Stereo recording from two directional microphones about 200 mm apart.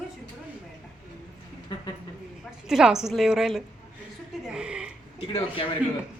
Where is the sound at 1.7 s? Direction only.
25° left (ahead or behind).